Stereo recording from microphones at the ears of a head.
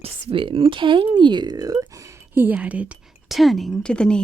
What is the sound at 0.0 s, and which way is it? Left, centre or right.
Speech, right.